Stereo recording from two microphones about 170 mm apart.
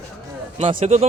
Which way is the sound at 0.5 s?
40° right (ahead or behind).